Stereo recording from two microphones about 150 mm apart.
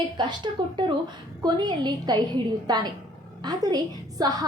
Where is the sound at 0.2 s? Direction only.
30° right (ahead or behind).